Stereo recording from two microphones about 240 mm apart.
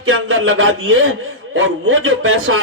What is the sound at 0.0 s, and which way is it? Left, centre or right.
A man's voice, right.